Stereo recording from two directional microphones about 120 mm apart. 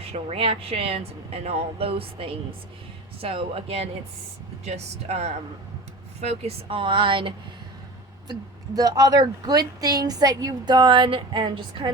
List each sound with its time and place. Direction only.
0.0 s speech: 55° right (ahead or behind)
4.6 s speech: 65° right (ahead or behind); by 7.3 s 45° right (ahead or behind)
8.3 s speech: 35° right (ahead or behind)